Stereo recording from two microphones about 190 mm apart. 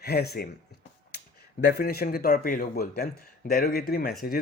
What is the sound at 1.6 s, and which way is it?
Speech, 55° left (ahead or behind).